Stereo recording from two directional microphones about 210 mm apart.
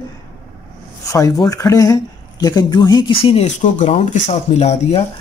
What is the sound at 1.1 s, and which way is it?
Speech, 15° left (ahead or behind).